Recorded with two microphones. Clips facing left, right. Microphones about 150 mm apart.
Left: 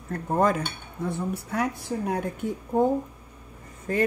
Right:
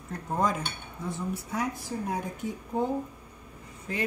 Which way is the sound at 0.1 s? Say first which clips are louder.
Left 5 dB; 60° left (ahead or behind).